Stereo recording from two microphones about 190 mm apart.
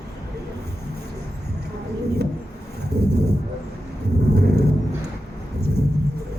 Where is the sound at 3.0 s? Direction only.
60° right (ahead or behind).